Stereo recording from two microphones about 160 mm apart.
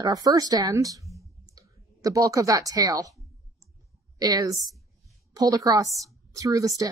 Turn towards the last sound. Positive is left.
turn(degrees=-20)  # may be behind; listen again after turning